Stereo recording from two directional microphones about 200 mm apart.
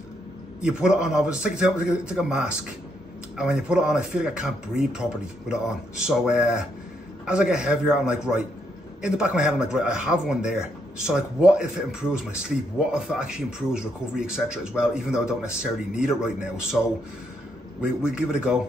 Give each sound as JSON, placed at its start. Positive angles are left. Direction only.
{"t": 0.6, "sound": "speech", "side_deg": -5}
{"t": 18.0, "sound": "speech", "side_deg": -5}